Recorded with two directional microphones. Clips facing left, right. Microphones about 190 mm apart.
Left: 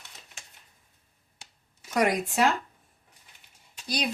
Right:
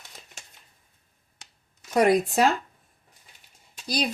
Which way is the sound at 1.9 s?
30° right (ahead or behind).